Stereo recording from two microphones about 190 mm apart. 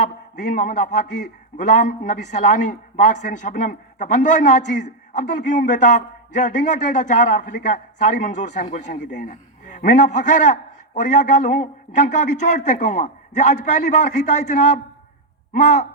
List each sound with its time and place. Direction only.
0.0 s a man's voice: 40° left (ahead or behind)